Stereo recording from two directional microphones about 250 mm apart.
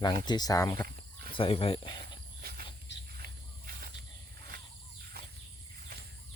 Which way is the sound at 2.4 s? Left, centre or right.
Right.